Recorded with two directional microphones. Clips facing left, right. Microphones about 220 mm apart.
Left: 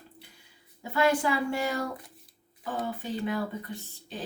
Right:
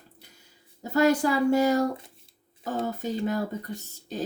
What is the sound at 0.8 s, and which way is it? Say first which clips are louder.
Speech: right 4 dB; 40° right (ahead or behind).